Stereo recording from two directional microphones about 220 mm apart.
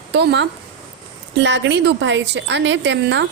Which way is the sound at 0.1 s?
50° right (ahead or behind).